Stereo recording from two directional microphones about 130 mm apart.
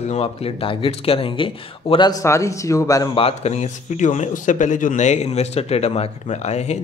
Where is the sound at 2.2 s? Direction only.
25° left (ahead or behind).